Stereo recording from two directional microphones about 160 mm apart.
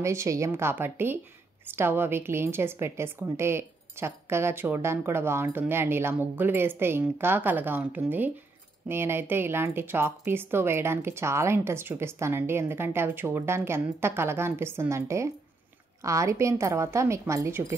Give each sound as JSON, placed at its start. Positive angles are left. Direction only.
{"t": 0.0, "sound": "a woman's voice", "side_deg": -20}